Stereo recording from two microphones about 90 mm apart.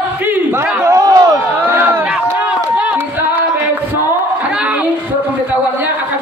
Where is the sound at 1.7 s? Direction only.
20° right (ahead or behind).